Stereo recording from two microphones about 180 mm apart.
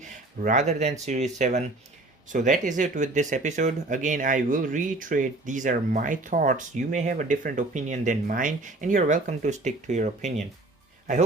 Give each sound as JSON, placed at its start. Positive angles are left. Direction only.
{"t": 0.0, "sound": "speech", "side_deg": -45}